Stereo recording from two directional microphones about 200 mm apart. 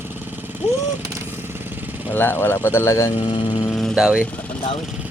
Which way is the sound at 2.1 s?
10° left (ahead or behind).